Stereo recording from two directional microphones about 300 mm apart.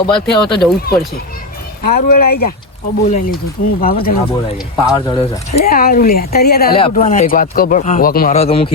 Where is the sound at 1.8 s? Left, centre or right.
Left.